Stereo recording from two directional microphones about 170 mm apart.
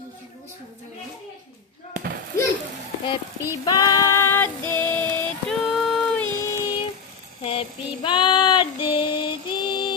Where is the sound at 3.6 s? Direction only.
20° left (ahead or behind).